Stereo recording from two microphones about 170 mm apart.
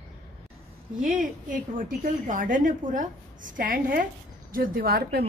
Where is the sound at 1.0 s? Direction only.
50° right (ahead or behind).